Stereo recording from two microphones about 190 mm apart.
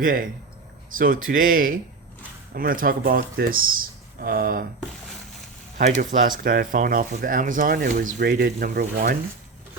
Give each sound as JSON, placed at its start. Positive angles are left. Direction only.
{"t": 0.0, "sound": "speech", "side_deg": -45}
{"t": 6.0, "sound": "speech", "side_deg": -45}